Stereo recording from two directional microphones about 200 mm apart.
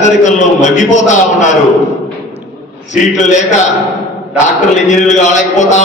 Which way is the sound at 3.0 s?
40° left (ahead or behind).